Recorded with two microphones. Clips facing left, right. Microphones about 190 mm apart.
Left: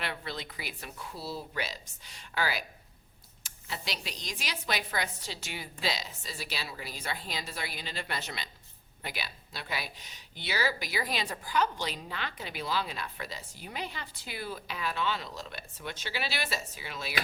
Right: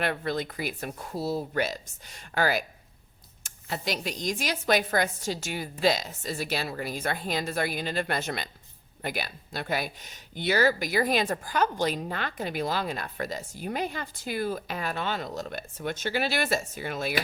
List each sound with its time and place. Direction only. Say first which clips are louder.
0.0 s speech: right 9 dB; 50° right (ahead or behind)